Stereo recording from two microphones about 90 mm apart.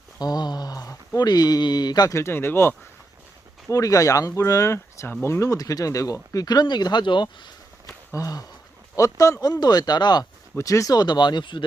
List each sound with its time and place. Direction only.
0.2 s a sound: 50° left (ahead or behind)
2.1 s speech: 30° left (ahead or behind)
3.7 s speech: 40° left (ahead or behind); by 7.5 s 60° left (ahead or behind)
8.1 s speech: 40° left (ahead or behind)
10.6 s speech: 40° left (ahead or behind); by 11.6 s 55° left (ahead or behind)